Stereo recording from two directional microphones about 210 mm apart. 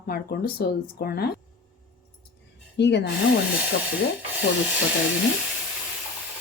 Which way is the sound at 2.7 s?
55° left (ahead or behind).